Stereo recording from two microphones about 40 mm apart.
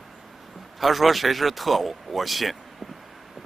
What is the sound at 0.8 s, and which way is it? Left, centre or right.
Speech, centre.